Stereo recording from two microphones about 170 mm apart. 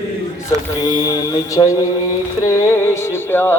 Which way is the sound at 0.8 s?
25° left (ahead or behind).